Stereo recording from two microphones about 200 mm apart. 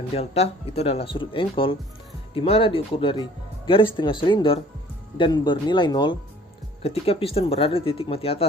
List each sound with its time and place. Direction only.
0.1 s speech: 30° left (ahead or behind)